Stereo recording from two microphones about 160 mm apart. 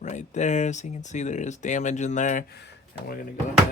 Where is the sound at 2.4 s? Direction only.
85° left; by 3.3 s 65° left (ahead or behind).